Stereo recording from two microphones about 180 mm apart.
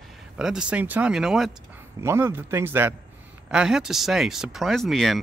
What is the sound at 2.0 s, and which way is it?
Speech, 15° right (ahead or behind).